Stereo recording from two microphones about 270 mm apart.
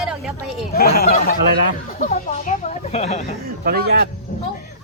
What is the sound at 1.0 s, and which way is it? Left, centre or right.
Speech, left.